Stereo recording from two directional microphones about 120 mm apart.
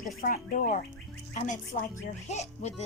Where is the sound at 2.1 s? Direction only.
70° left (ahead or behind).